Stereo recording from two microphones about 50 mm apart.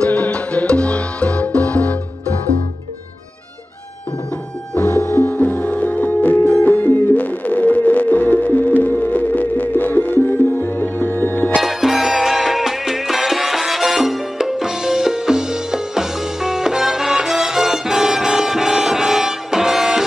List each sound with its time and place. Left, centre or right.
0.0 s music: left
5.0 s music: left
11.6 s music: centre